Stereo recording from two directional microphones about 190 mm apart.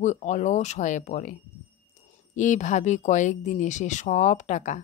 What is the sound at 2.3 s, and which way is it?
A woman's voice, 40° left (ahead or behind).